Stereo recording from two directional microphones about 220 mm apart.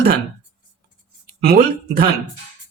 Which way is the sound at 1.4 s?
45° right (ahead or behind).